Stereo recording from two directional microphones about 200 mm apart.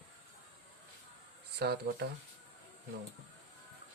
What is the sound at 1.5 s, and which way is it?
Speech, 55° right (ahead or behind).